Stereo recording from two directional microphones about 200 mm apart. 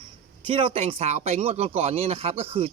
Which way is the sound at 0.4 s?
25° right (ahead or behind).